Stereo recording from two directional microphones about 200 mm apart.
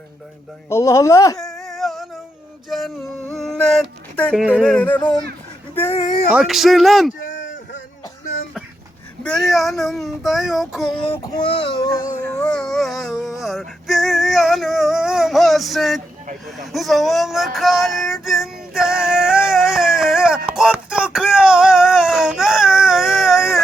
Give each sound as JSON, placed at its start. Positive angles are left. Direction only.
{"t": 0.7, "sound": "speech", "side_deg": 15}
{"t": 1.4, "sound": "a sound", "side_deg": 0}
{"t": 4.6, "sound": "speech", "side_deg": 5}
{"t": 6.3, "sound": "child singing", "side_deg": 0}
{"t": 9.5, "sound": "child singing", "side_deg": 0}
{"t": 11.0, "sound": "speech", "side_deg": 25}
{"t": 12.3, "sound": "music", "side_deg": 5}
{"t": 16.5, "sound": "a sound", "side_deg": 0}